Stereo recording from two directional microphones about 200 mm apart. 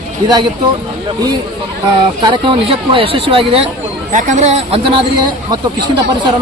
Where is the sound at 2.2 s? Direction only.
25° right (ahead or behind).